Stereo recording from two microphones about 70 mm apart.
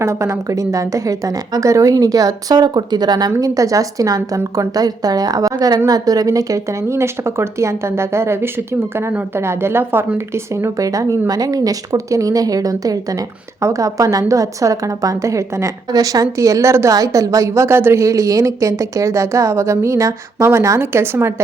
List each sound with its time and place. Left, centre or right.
0.0 s speech: right
3.4 s speech: right
5.5 s a woman's voice: right
5.9 s speech: right
10.8 s speech: right
15.9 s a woman's voice: right